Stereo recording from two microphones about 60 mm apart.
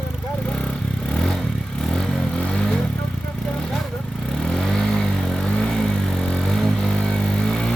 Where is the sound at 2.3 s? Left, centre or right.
Centre.